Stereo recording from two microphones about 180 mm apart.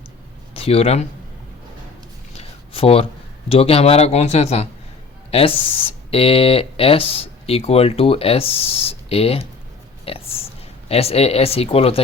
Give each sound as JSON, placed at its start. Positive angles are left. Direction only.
{"t": 0.5, "sound": "speech", "side_deg": 30}
{"t": 2.3, "sound": "a sound", "side_deg": 35}
{"t": 3.5, "sound": "speech", "side_deg": 35}